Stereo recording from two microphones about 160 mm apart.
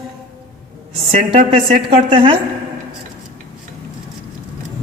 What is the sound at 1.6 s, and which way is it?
Speech, 35° right (ahead or behind).